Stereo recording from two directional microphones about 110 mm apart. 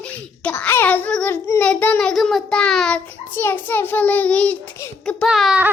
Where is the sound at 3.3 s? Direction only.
20° left (ahead or behind).